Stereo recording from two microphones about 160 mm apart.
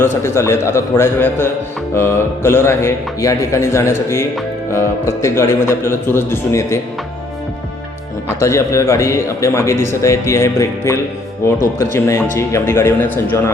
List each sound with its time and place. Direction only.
0.0 s speech: 15° left (ahead or behind)
8.4 s speech: 15° left (ahead or behind)
11.9 s speech: 15° left (ahead or behind)